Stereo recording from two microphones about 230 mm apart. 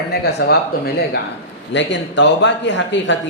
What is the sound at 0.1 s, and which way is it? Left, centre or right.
Speech, left.